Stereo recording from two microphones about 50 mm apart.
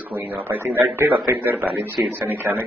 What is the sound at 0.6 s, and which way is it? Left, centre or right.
Speech, right.